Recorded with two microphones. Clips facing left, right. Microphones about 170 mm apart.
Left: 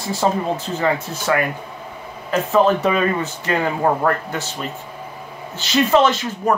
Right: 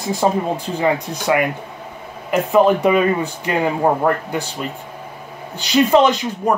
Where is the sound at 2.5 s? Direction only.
15° right (ahead or behind).